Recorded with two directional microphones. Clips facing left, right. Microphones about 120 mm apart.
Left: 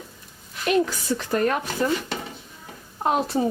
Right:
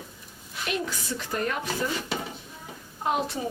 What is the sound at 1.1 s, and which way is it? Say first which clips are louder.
Speech: left 9 dB; 55° left (ahead or behind).